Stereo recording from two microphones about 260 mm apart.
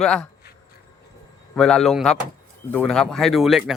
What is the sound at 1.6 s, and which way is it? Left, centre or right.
Speech, centre.